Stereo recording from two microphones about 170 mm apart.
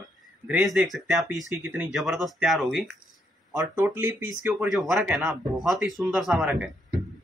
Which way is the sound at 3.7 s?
15° right (ahead or behind).